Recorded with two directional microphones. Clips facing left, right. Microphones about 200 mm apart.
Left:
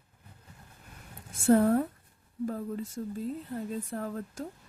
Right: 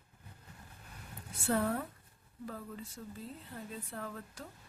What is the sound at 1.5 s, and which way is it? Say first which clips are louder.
A woman's voice: left 10 dB; 40° left (ahead or behind).